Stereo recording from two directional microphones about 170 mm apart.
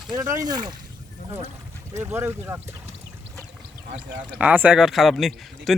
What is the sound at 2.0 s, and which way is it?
Speech, 15° right (ahead or behind).